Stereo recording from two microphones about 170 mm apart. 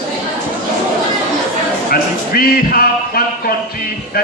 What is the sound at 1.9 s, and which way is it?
Speech, 60° left (ahead or behind).